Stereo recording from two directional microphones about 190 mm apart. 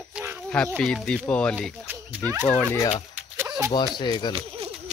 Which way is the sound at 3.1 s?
5° right (ahead or behind).